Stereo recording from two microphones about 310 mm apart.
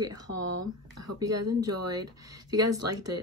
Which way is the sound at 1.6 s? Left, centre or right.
Centre.